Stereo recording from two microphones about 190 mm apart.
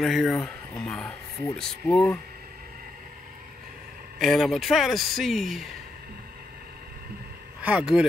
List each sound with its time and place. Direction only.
0.0 s speech: centre (ahead or behind)
4.2 s speech: centre (ahead or behind)
7.6 s speech: 5° right (ahead or behind)